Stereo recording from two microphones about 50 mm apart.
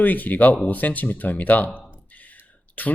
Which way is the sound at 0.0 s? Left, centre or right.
Left.